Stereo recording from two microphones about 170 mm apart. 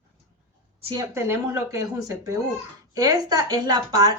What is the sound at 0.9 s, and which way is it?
Speech, 20° right (ahead or behind).